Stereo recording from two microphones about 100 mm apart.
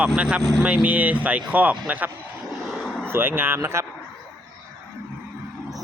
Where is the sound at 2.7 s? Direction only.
5° left (ahead or behind).